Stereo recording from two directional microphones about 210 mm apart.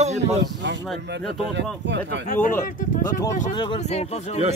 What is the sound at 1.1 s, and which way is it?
Speech, 55° right (ahead or behind).